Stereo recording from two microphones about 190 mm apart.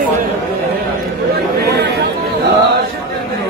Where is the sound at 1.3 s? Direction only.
60° right (ahead or behind).